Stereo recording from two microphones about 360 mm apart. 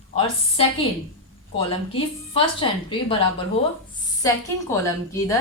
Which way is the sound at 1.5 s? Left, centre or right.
Centre.